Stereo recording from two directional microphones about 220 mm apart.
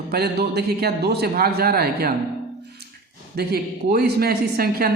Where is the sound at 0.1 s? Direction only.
45° right (ahead or behind).